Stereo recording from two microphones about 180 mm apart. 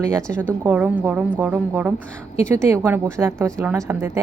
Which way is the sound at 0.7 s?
10° right (ahead or behind).